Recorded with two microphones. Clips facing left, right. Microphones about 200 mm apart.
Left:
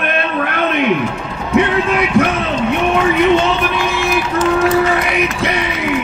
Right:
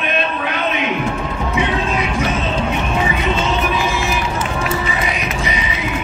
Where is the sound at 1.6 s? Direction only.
60° left (ahead or behind).